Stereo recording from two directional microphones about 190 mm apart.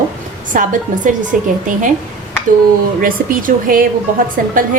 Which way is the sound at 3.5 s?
45° right (ahead or behind).